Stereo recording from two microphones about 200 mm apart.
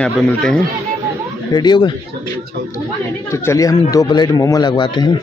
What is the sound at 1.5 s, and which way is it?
Speech, 20° left (ahead or behind).